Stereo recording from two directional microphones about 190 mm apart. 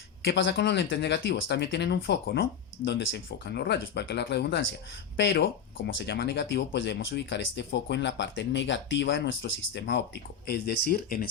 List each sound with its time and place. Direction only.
0.3 s speech: 75° left (ahead or behind)
10.4 s speech: 55° left (ahead or behind)